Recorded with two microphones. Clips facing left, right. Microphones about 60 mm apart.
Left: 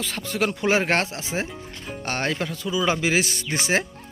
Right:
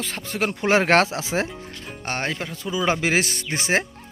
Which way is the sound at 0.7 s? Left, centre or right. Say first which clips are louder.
Right 6 dB; right.